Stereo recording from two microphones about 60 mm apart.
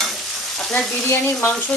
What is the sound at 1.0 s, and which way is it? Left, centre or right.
Frying, left.